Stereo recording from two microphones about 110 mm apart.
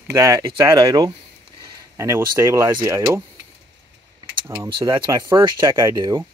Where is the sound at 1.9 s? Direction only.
25° right (ahead or behind).